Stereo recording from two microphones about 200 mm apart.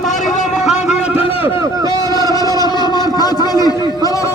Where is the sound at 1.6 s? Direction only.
20° right (ahead or behind).